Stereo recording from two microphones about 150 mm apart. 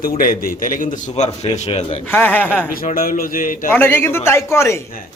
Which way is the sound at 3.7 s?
15° left (ahead or behind).